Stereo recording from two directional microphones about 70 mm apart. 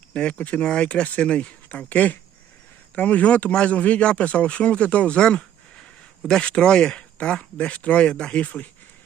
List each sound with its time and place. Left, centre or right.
0.1 s speech: centre